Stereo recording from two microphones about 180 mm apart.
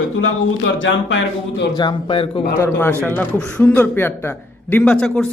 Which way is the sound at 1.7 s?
25° left (ahead or behind).